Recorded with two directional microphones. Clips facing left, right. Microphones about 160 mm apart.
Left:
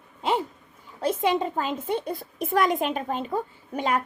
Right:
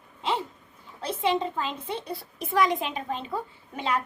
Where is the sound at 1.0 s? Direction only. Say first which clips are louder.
Left 3 dB; 45° left (ahead or behind).